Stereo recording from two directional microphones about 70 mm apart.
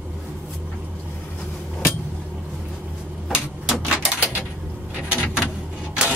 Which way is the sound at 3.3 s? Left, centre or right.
Centre.